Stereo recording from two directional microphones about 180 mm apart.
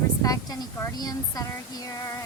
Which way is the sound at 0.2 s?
20° left (ahead or behind).